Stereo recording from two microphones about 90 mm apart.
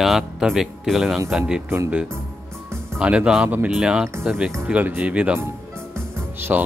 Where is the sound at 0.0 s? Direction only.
5° right (ahead or behind).